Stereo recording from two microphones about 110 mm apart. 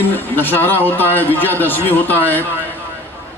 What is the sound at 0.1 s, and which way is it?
A man's voice, 20° left (ahead or behind).